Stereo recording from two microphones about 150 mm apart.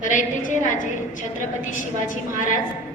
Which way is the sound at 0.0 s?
60° left (ahead or behind).